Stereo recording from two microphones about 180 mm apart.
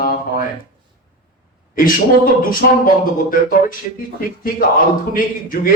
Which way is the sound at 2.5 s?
50° left (ahead or behind).